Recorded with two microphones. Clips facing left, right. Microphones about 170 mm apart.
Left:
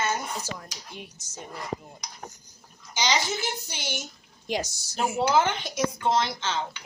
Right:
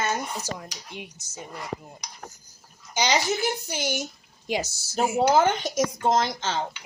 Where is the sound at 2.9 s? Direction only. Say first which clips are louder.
Right 3 dB; 45° right (ahead or behind).